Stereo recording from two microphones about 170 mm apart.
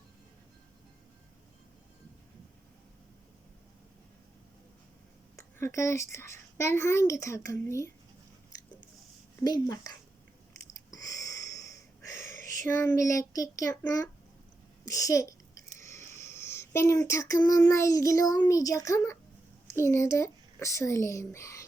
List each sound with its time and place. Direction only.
5.4 s a child's voice: 15° left (ahead or behind)
9.4 s speech: 20° left (ahead or behind)
10.9 s sniff: 20° left (ahead or behind)
12.4 s a sound: 50° right (ahead or behind)
12.6 s speech: 15° left (ahead or behind)
14.8 s a sound: 20° left (ahead or behind)
17.1 s a child's voice: 20° left (ahead or behind)